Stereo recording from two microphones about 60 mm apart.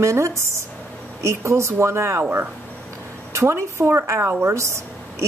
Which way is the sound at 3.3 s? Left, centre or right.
Right.